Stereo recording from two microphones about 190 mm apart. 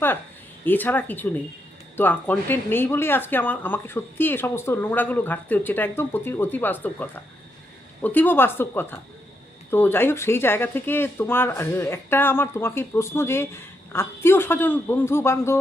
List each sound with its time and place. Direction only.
0.6 s speech: 10° left (ahead or behind)